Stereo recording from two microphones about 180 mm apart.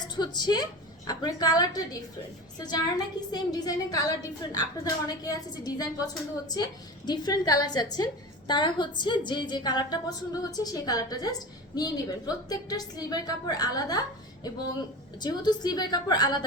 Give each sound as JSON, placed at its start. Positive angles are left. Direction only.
{"t": 0.0, "sound": "a woman's voice", "side_deg": 25}
{"t": 3.2, "sound": "a woman's voice", "side_deg": 20}
{"t": 15.2, "sound": "a woman's voice", "side_deg": 25}